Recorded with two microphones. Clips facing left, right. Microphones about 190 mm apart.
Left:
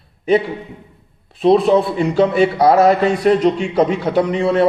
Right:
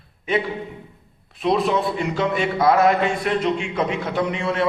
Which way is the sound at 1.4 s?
35° left (ahead or behind).